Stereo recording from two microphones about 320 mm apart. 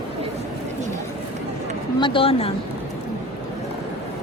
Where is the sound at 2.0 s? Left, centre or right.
Centre.